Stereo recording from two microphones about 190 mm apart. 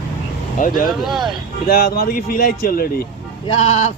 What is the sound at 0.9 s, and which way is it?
Speech, centre (ahead or behind).